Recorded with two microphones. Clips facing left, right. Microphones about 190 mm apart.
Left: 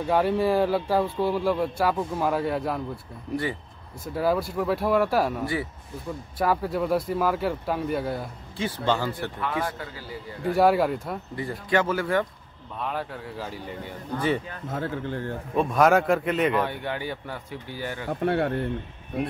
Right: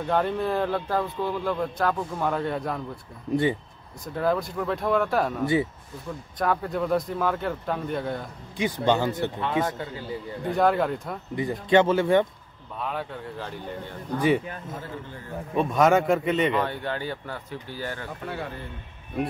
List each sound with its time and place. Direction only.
0.0 s speech: 5° left (ahead or behind)
4.0 s speech: 5° left (ahead or behind)
8.5 s speech: 15° right (ahead or behind)
10.4 s speech: 5° left (ahead or behind)
11.3 s speech: 20° right (ahead or behind)
12.7 s speech: centre (ahead or behind)
14.1 s speech: 15° right (ahead or behind)
14.7 s speech: 70° left (ahead or behind)
15.5 s speech: centre (ahead or behind)
16.6 s speech: 15° left (ahead or behind)
18.2 s speech: 70° left (ahead or behind)